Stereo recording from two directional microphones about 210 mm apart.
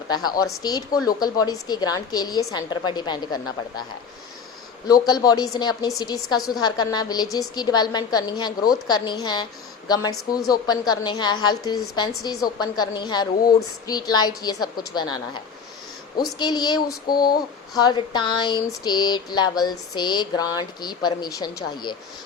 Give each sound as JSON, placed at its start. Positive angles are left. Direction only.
{"t": 0.6, "sound": "a woman's voice", "side_deg": 20}
{"t": 4.9, "sound": "a man's voice", "side_deg": 20}
{"t": 16.4, "sound": "a woman's voice", "side_deg": 20}